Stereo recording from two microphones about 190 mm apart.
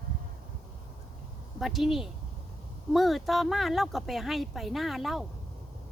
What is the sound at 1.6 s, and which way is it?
Speech, centre (ahead or behind).